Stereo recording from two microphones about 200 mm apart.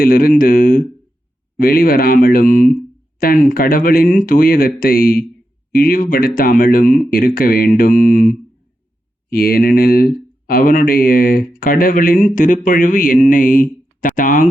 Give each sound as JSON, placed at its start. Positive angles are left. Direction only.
{"t": 0.0, "sound": "speech", "side_deg": 45}